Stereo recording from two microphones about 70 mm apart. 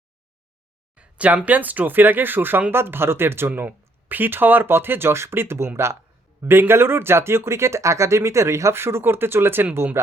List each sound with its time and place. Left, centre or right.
0.9 s speech: centre; by 3.5 s right
3.5 s speech: right